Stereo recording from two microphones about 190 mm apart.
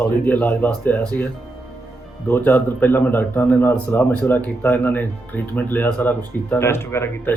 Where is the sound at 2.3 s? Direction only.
10° left (ahead or behind).